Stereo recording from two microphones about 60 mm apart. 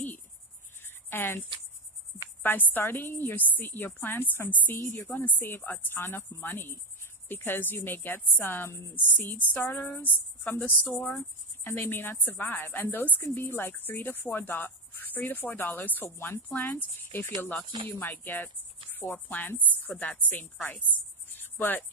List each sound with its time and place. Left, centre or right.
0.8 s cricket: left
2.4 s speech: left
9.5 s a woman's voice: left
21.3 s cricket: left